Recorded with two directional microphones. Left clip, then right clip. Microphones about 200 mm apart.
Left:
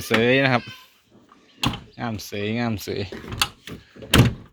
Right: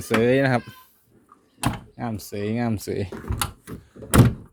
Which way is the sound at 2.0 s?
15° right (ahead or behind).